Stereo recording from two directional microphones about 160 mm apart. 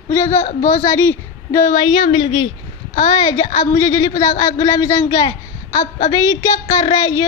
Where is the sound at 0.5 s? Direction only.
50° left (ahead or behind).